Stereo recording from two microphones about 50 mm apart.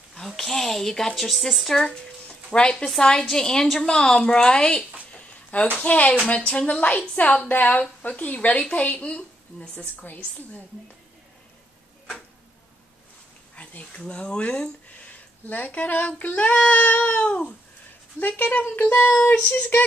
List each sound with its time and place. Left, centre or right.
0.4 s speech: centre
2.2 s a sound: centre
3.0 s speech: centre
5.8 s a woman's voice: left
7.5 s child singing: left
8.0 s a woman's voice: left
13.6 s speech: left
15.4 s child singing: left
18.9 s a woman's voice: left